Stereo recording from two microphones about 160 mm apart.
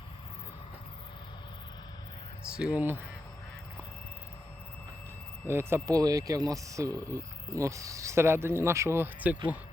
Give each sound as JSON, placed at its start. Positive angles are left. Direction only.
{"t": 2.6, "sound": "speech", "side_deg": -10}
{"t": 5.5, "sound": "speech", "side_deg": -15}